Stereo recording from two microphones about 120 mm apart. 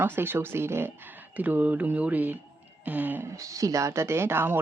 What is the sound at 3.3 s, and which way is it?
Speech, 25° right (ahead or behind).